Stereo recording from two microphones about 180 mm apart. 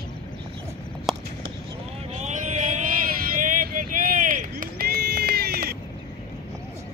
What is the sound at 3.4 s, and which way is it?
Run, 45° right (ahead or behind).